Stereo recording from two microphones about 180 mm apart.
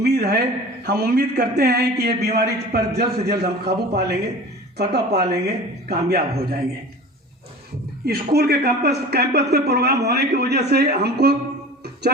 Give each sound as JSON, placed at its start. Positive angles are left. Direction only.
{"t": 0.0, "sound": "a sound", "side_deg": -65}
{"t": 0.9, "sound": "a man's voice", "side_deg": -65}
{"t": 8.0, "sound": "a man's voice", "side_deg": -60}